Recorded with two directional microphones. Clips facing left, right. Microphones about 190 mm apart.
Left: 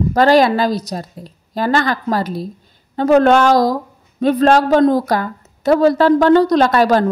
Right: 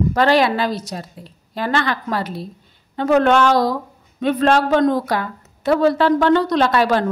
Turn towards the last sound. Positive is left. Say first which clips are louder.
# left 4 dB
turn(degrees=40)  # may be behind; listen again after turning